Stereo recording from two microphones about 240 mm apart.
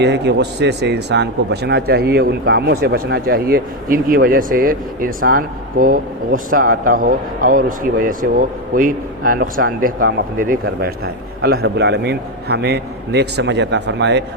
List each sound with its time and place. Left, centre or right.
0.0 s a man's voice: right